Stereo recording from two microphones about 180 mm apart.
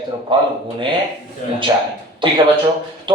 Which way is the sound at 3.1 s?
25° right (ahead or behind).